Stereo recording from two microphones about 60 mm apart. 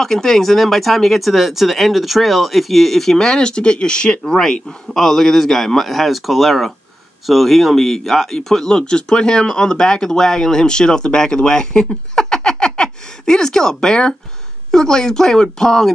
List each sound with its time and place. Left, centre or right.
0.0 s speech: centre